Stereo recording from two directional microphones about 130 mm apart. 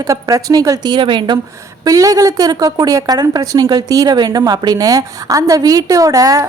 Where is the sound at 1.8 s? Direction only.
25° right (ahead or behind).